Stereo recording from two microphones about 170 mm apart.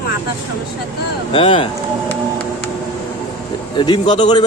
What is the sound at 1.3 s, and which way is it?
Speech, 30° left (ahead or behind).